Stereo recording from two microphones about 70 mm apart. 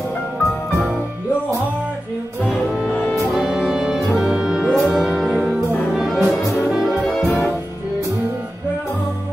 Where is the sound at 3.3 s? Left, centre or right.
Centre.